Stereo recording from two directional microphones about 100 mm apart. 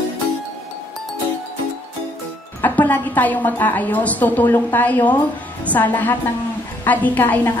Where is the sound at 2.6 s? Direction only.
20° left (ahead or behind).